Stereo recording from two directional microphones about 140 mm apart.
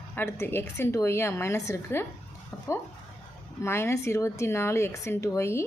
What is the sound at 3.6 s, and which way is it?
A woman's voice, 20° left (ahead or behind).